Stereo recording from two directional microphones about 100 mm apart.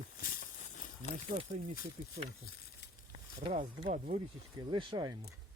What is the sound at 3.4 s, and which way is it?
Speech, 65° right (ahead or behind).